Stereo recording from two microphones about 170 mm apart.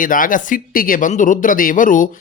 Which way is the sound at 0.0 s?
50° left (ahead or behind).